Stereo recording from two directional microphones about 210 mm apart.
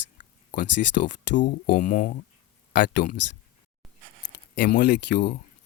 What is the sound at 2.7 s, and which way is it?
Speech, 55° left (ahead or behind).